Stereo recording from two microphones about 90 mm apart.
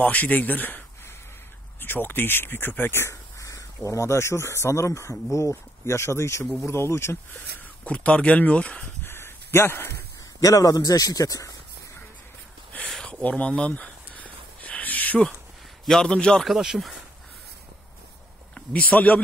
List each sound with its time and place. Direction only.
0.0 s speech: 15° left (ahead or behind)
7.8 s speech: 15° left (ahead or behind)
9.0 s a sound: 25° left (ahead or behind)
10.4 s speech: 40° left (ahead or behind)
12.9 s a sound: 10° left (ahead or behind)
15.8 s speech: 5° left (ahead or behind)
16.5 s speech: 5° right (ahead or behind)
18.5 s speech: 15° left (ahead or behind)